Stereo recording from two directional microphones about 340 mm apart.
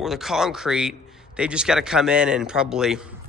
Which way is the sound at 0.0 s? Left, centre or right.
Centre.